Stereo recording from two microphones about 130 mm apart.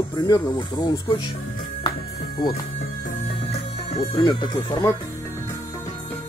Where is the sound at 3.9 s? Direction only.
40° left (ahead or behind).